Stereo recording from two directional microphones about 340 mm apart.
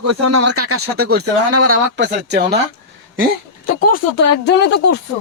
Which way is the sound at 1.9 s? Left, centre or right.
Right.